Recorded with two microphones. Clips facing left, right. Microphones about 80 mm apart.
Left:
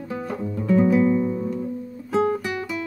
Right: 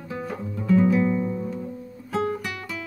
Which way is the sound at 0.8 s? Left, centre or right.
Centre.